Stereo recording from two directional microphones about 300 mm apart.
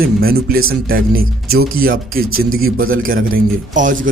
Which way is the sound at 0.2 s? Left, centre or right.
Right.